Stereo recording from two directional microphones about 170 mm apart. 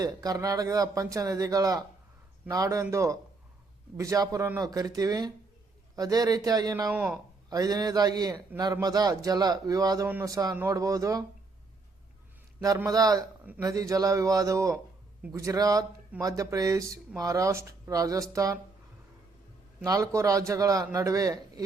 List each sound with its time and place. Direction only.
0.0 s a man's voice: 20° right (ahead or behind)
6.9 s speech: 10° right (ahead or behind)
7.5 s a man's voice: 20° right (ahead or behind)
10.1 s a man's voice: 10° right (ahead or behind)
12.6 s a man's voice: 20° right (ahead or behind)
13.4 s a man's voice: 10° right (ahead or behind)
13.7 s a man's voice: 20° right (ahead or behind)
19.8 s a man's voice: 20° right (ahead or behind)